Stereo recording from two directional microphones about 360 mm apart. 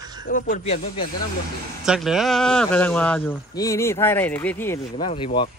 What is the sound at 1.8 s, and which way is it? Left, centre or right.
A man's voice, centre.